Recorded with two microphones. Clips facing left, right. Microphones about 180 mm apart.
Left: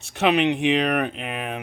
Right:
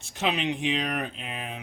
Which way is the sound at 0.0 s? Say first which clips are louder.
Left 8 dB; 65° left (ahead or behind).